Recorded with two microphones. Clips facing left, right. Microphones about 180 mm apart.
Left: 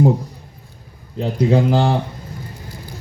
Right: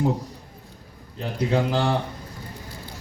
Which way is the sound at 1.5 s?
35° left (ahead or behind).